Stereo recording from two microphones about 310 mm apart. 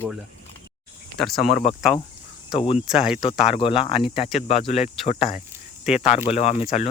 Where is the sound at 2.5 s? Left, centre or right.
Centre.